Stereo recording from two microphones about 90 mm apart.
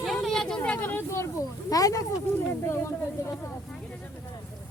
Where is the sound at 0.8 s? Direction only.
25° left (ahead or behind).